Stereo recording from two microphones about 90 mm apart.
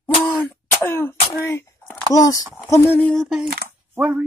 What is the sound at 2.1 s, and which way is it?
Speech, 40° left (ahead or behind).